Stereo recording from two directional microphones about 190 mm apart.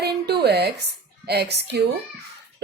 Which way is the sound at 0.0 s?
60° right (ahead or behind).